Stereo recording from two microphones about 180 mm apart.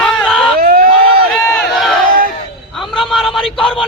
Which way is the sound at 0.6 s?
55° right (ahead or behind).